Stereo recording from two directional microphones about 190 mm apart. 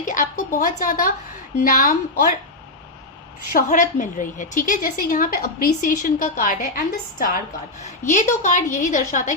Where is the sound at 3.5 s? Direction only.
45° left (ahead or behind).